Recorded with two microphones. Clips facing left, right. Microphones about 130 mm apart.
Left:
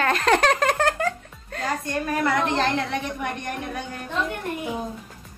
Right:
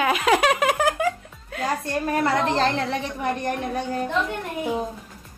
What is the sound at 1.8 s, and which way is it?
A woman's voice, 30° right (ahead or behind).